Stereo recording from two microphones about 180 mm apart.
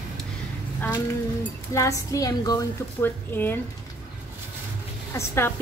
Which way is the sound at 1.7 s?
20° left (ahead or behind).